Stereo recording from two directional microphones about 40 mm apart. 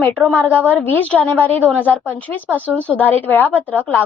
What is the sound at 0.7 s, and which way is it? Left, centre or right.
A woman's voice, left.